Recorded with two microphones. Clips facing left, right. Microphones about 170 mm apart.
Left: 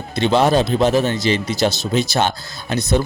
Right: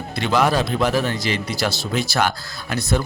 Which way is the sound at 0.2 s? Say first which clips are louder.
Left 4 dB; 25° left (ahead or behind).